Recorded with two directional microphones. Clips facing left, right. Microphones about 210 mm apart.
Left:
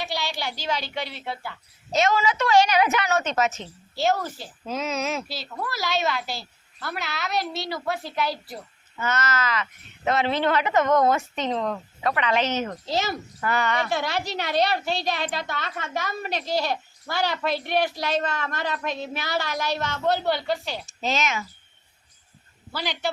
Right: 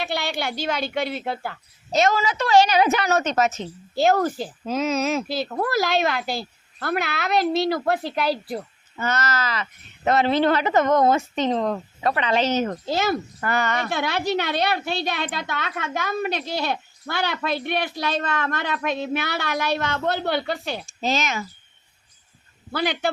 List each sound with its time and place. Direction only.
0.0 s speech: 55° right (ahead or behind); by 3.5 s 40° right (ahead or behind)
4.0 s speech: 50° right (ahead or behind)
4.7 s speech: 40° right (ahead or behind); by 8.6 s 55° right (ahead or behind)
9.0 s speech: 35° right (ahead or behind)
12.6 s a woman's voice: 50° right (ahead or behind)
21.0 s speech: 35° right (ahead or behind)
22.7 s a woman's voice: 55° right (ahead or behind)